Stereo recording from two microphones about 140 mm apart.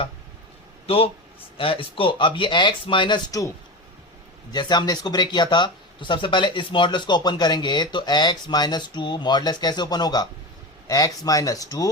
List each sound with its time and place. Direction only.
0.9 s speech: 45° left (ahead or behind)
4.5 s speech: 30° left (ahead or behind)